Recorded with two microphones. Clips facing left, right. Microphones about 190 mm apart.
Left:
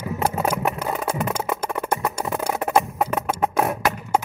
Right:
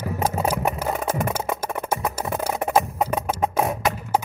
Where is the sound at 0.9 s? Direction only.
50° right (ahead or behind).